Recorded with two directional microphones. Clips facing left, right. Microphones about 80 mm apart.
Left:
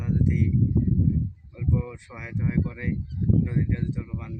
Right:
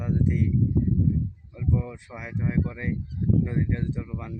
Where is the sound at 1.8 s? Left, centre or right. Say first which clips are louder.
Right 1 dB; centre.